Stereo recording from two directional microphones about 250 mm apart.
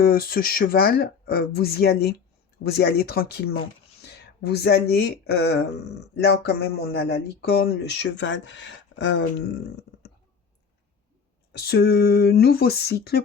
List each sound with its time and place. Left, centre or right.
0.0 s speech: left
11.5 s speech: left